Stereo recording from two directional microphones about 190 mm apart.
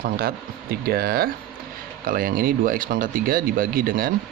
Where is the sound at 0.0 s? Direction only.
50° right (ahead or behind).